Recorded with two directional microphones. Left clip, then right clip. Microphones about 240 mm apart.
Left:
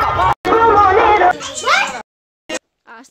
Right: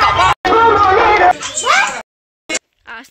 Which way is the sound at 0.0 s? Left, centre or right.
Centre.